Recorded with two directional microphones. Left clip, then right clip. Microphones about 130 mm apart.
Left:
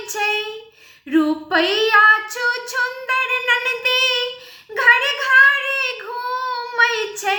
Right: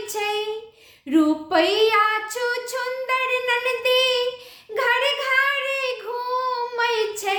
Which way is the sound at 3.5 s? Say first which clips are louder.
Left 2 dB; 45° right (ahead or behind).